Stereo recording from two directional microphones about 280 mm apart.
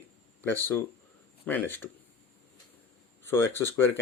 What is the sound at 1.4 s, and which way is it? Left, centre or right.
Speech, centre.